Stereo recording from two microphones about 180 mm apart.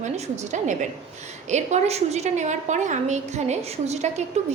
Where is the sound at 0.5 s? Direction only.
45° right (ahead or behind).